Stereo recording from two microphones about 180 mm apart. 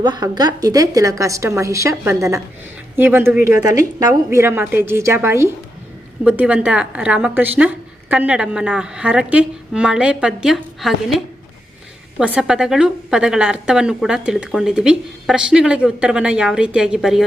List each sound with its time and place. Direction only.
0.0 s a woman's voice: 20° right (ahead or behind); by 11.2 s centre (ahead or behind)
12.2 s a woman's voice: 5° right (ahead or behind)